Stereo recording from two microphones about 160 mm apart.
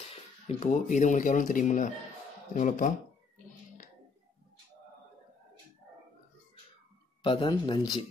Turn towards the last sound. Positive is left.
turn(degrees=25)  # may be behind; listen again after turning